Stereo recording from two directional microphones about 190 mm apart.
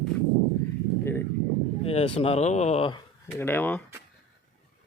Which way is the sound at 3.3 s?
10° left (ahead or behind).